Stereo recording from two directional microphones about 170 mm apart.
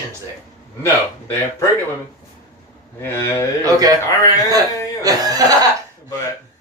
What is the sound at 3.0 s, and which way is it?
Speech, 15° left (ahead or behind).